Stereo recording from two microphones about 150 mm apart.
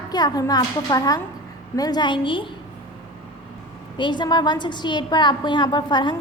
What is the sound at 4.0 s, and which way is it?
A woman's voice, 30° left (ahead or behind).